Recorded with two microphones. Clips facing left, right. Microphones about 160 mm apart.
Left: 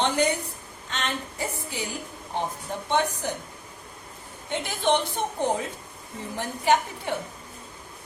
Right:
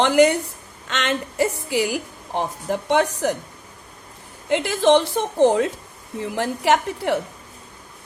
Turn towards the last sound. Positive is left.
turn(degrees=-80)